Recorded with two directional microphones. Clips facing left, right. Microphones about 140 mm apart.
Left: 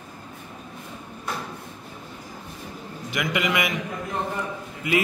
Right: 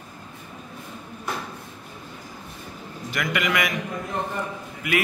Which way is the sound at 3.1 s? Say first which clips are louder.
Even; 20° left (ahead or behind).